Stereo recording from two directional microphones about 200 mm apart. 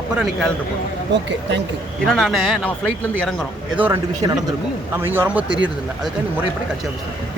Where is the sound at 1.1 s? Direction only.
60° right (ahead or behind).